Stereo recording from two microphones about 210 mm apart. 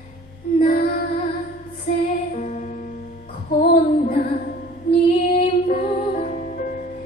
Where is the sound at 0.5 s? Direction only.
45° left (ahead or behind).